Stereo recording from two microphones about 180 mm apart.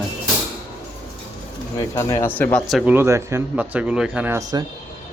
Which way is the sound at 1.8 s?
15° left (ahead or behind).